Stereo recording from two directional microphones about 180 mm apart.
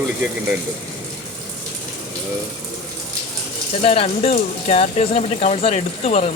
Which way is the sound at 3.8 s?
35° left (ahead or behind).